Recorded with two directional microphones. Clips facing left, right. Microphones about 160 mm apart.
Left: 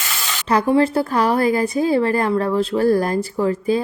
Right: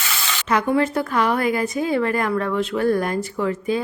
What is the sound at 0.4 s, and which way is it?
A woman's voice, 35° left (ahead or behind).